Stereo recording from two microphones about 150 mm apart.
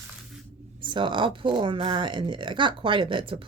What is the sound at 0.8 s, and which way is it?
Speech, 35° right (ahead or behind).